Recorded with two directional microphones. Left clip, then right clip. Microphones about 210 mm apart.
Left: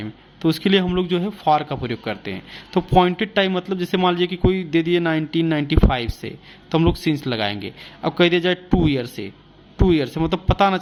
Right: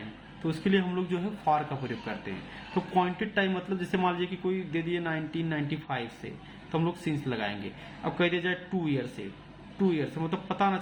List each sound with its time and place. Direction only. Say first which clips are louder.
0.4 s speech: left 10 dB; 50° left (ahead or behind)